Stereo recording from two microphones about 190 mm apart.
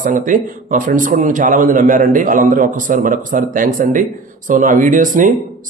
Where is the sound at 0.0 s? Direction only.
45° right (ahead or behind).